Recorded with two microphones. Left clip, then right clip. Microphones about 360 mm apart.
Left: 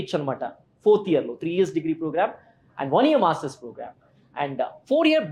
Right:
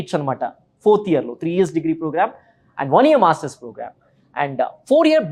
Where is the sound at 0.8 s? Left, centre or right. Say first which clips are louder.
Right 4 dB; right.